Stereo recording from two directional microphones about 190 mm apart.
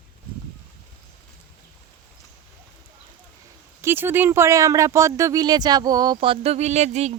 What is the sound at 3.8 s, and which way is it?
Speech, 10° right (ahead or behind).